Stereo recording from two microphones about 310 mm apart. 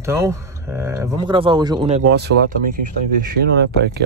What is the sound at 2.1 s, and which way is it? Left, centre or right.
Speech, right.